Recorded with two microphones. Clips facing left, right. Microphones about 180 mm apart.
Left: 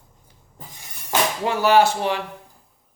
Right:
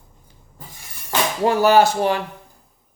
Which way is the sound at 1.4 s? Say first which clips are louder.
Right 3 dB; 40° right (ahead or behind).